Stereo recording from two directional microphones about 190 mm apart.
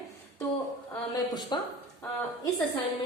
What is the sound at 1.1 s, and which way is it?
Speech, 25° left (ahead or behind).